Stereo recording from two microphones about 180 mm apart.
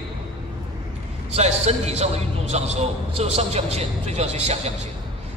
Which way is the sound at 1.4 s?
40° right (ahead or behind).